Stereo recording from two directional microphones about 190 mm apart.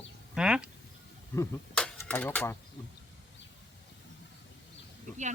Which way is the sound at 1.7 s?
5° left (ahead or behind).